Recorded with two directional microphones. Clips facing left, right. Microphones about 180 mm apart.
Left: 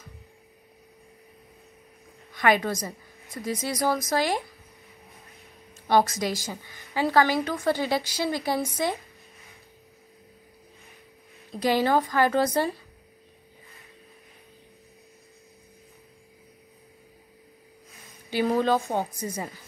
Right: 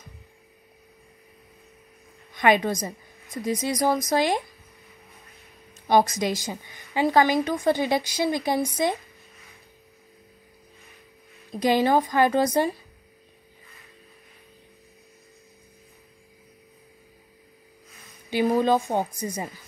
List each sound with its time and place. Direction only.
2.3 s a woman's voice: 20° right (ahead or behind)
5.9 s a woman's voice: 15° right (ahead or behind)
11.5 s a woman's voice: 15° right (ahead or behind)
18.3 s a woman's voice: 15° right (ahead or behind)